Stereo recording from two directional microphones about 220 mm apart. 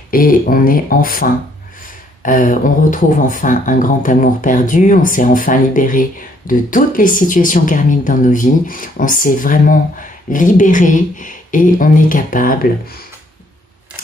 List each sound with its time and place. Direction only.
0.1 s speech: 40° left (ahead or behind)